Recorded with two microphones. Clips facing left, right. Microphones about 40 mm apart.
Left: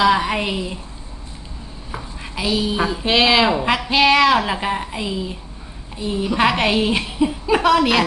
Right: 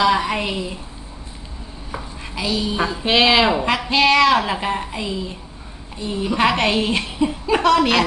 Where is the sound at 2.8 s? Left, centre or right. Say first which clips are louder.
Right 1 dB; centre.